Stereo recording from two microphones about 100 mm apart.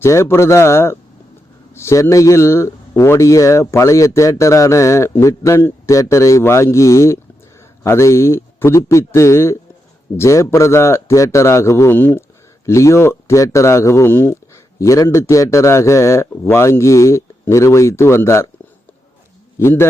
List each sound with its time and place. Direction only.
0.0 s a man's voice: 25° left (ahead or behind)
19.5 s speech: 25° left (ahead or behind)